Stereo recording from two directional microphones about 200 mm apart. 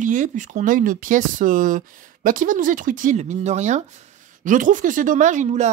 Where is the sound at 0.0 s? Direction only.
40° right (ahead or behind).